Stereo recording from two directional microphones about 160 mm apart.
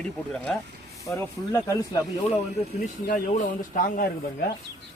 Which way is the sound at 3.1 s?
55° left (ahead or behind).